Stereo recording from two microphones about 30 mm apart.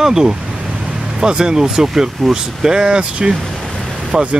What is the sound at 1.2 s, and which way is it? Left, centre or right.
Speech, right.